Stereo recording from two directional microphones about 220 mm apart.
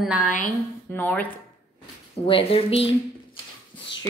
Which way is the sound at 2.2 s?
25° left (ahead or behind).